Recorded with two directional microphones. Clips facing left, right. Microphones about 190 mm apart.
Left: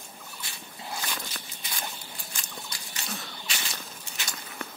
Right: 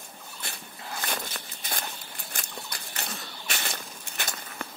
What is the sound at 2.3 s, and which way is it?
Horse, 60° right (ahead or behind).